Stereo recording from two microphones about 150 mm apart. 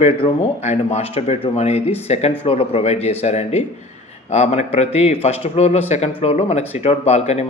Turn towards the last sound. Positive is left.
turn(degrees=45)  # may be behind; listen again after turning